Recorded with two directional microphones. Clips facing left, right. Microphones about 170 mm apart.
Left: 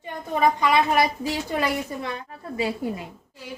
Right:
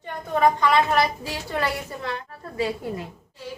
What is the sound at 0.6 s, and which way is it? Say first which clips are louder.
Speech: even; 15° left (ahead or behind).